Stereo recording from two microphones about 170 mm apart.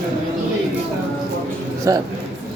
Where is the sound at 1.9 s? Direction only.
20° right (ahead or behind).